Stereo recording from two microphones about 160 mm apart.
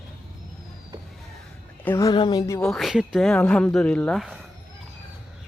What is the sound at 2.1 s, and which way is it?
Speech, 30° left (ahead or behind).